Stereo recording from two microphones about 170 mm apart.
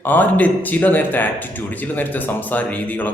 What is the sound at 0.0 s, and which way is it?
A man's voice, 10° left (ahead or behind).